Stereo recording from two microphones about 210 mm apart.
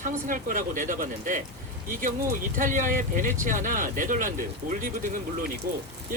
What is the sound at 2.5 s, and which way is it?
Speech, 40° right (ahead or behind).